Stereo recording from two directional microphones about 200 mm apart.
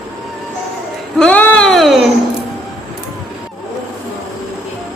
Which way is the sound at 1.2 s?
5° left (ahead or behind).